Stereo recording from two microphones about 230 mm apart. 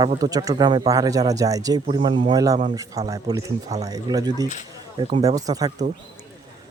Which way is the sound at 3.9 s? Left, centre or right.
Centre.